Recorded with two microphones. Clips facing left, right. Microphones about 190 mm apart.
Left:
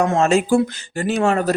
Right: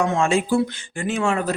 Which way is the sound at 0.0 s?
40° left (ahead or behind).